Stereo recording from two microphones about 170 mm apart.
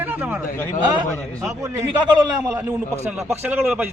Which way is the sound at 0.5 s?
15° left (ahead or behind).